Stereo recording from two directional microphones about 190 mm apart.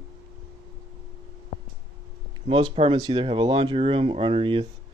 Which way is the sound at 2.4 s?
30° right (ahead or behind).